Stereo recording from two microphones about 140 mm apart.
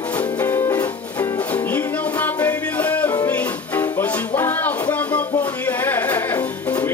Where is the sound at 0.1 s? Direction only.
15° left (ahead or behind).